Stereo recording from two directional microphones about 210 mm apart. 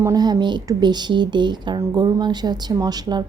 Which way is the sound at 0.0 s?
20° right (ahead or behind).